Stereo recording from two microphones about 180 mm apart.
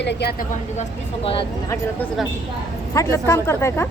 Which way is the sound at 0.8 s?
30° left (ahead or behind).